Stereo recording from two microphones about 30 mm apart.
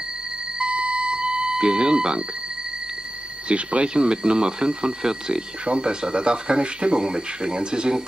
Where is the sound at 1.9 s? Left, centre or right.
Right.